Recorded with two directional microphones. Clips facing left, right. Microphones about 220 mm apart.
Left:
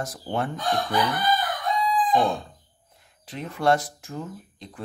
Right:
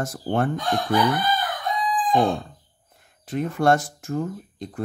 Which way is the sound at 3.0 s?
50° right (ahead or behind).